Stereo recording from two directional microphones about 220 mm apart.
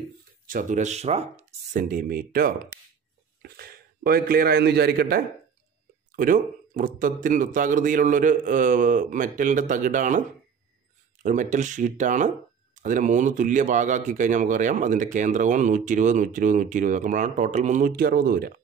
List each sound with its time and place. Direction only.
0.5 s a man's voice: 35° right (ahead or behind)
11.2 s speech: 35° right (ahead or behind)